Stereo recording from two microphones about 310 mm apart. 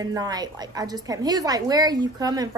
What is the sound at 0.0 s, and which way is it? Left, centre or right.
A woman's voice, centre.